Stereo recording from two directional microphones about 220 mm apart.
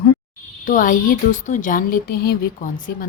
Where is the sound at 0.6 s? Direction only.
35° left (ahead or behind).